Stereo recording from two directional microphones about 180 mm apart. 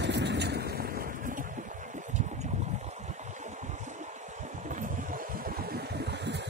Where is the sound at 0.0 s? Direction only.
70° right (ahead or behind).